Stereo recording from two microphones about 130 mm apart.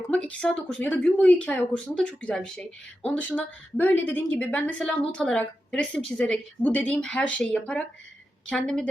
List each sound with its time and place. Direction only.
0.1 s speech: 10° left (ahead or behind)